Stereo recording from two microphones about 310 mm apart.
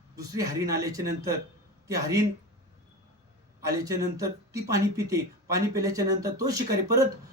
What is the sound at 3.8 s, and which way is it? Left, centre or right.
Speech, centre.